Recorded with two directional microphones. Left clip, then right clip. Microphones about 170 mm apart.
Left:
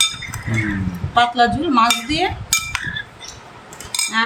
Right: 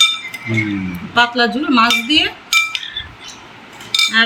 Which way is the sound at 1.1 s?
60° left (ahead or behind).